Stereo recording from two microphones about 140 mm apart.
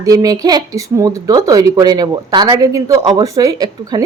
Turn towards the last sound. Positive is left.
turn(degrees=-25)  # may be behind; listen again after turning